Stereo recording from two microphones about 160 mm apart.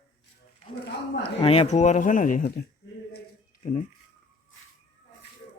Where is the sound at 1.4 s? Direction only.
35° left (ahead or behind); by 2.5 s 55° left (ahead or behind).